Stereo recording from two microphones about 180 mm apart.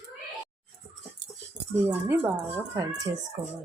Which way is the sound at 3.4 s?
25° right (ahead or behind).